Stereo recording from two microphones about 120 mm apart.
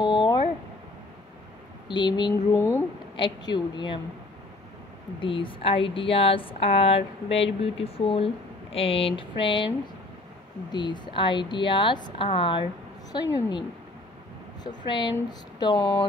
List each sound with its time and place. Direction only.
0.0 s a sound: 40° left (ahead or behind)
1.9 s a woman's voice: 40° left (ahead or behind)
2.5 s speech: 20° left (ahead or behind)
3.2 s a woman's voice: 40° left (ahead or behind)
5.2 s speech: 45° left (ahead or behind)
10.7 s a woman's voice: 40° left (ahead or behind)
14.9 s a woman's voice: 40° left (ahead or behind)